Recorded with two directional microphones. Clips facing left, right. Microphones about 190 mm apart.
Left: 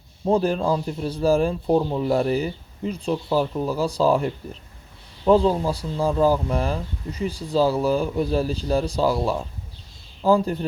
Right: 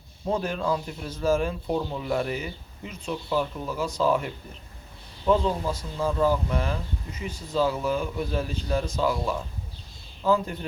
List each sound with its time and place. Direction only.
0.3 s speech: 35° left (ahead or behind)